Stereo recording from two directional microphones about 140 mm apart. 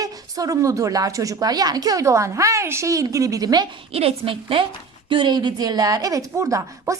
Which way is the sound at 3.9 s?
45° right (ahead or behind).